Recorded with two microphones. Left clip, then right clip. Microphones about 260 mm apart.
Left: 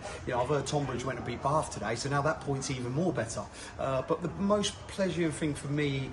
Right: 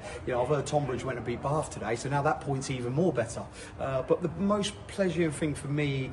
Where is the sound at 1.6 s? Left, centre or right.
Centre.